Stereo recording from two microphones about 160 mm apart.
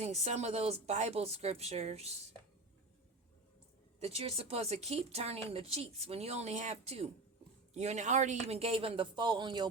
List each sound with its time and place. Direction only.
0.0 s speech: 45° right (ahead or behind)
4.0 s speech: 40° right (ahead or behind)